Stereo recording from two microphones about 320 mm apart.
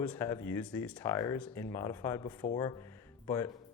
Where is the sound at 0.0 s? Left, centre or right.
Centre.